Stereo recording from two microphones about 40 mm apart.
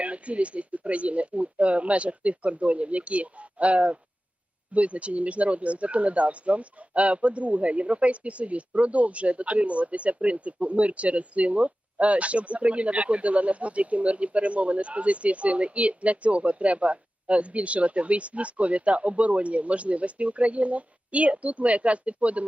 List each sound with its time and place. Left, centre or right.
0.0 s speech: right